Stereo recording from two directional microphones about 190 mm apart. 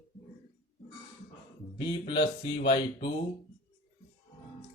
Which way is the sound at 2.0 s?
25° left (ahead or behind).